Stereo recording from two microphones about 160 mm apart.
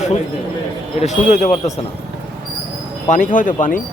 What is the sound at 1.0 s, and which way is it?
Speech, 45° left (ahead or behind).